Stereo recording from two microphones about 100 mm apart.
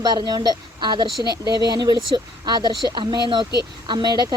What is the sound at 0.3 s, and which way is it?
Speech, 45° right (ahead or behind).